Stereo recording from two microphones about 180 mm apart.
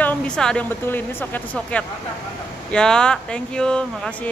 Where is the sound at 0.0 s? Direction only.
5° left (ahead or behind).